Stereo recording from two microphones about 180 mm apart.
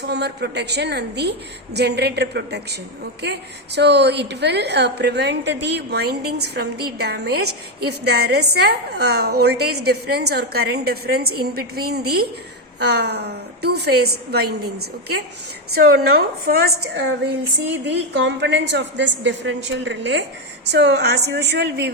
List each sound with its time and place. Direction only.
0.1 s a woman's voice: 65° right (ahead or behind)
3.8 s a woman's voice: 70° right (ahead or behind)
17.7 s a woman's voice: 75° right (ahead or behind)
20.7 s a woman's voice: 70° right (ahead or behind)